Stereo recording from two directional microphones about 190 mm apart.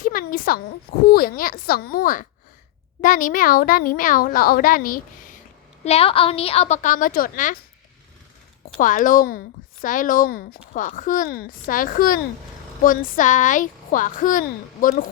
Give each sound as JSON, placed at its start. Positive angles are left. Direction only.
{"t": 0.0, "sound": "a sound", "side_deg": 45}
{"t": 1.1, "sound": "a child's voice", "side_deg": 50}
{"t": 5.8, "sound": "a woman's voice", "side_deg": 30}
{"t": 8.8, "sound": "a child's voice", "side_deg": 45}